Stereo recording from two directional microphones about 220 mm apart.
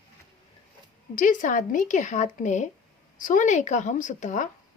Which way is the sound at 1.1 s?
35° left (ahead or behind).